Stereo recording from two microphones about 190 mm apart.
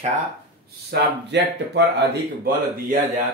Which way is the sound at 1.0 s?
65° right (ahead or behind).